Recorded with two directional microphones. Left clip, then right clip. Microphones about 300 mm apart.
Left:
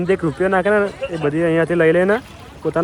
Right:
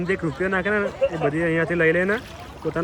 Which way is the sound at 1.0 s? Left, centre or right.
Right.